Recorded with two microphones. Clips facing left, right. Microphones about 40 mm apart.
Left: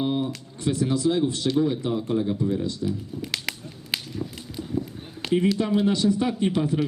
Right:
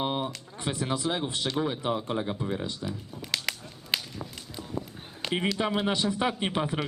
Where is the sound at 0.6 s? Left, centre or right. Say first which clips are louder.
Left 7 dB; right.